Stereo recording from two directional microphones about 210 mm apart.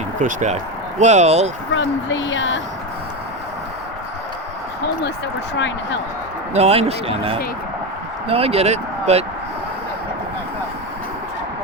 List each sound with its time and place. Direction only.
0.2 s speech: 40° right (ahead or behind)
1.7 s speech: 65° left (ahead or behind)
5.5 s speech: 60° left (ahead or behind)
6.5 s speech: 30° right (ahead or behind)